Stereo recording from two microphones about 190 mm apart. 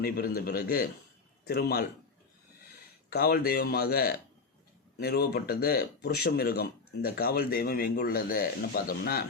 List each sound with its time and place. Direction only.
0.0 s a man's voice: 55° left (ahead or behind)
3.1 s speech: 55° left (ahead or behind)